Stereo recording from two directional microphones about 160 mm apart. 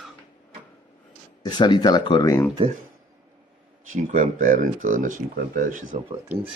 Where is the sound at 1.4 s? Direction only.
30° left (ahead or behind).